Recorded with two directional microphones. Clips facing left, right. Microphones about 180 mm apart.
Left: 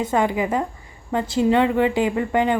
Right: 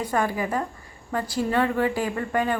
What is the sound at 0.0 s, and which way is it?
A woman's voice, 20° left (ahead or behind).